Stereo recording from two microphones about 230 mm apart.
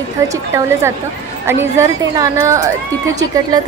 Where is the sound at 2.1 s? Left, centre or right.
Centre.